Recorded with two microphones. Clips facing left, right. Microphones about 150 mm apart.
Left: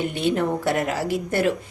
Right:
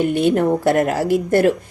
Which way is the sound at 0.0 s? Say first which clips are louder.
Right 6 dB; 50° right (ahead or behind).